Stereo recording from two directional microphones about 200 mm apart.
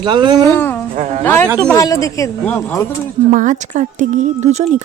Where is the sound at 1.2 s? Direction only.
10° left (ahead or behind).